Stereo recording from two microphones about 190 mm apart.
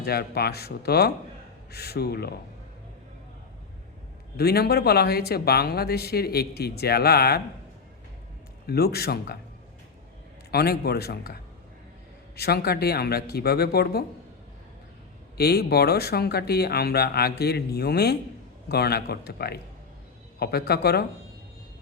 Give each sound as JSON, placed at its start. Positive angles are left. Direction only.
{"t": 0.0, "sound": "speech", "side_deg": 55}
{"t": 4.4, "sound": "speech", "side_deg": 55}
{"t": 8.6, "sound": "speech", "side_deg": 55}
{"t": 10.5, "sound": "speech", "side_deg": 55}
{"t": 12.4, "sound": "speech", "side_deg": 55}
{"t": 15.4, "sound": "speech", "side_deg": 55}